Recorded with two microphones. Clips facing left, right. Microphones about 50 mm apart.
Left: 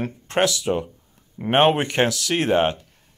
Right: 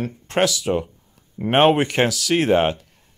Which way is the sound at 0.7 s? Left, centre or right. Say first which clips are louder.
Right 1 dB; centre.